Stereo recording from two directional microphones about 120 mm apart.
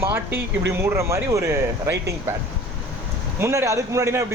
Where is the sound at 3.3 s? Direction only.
20° right (ahead or behind).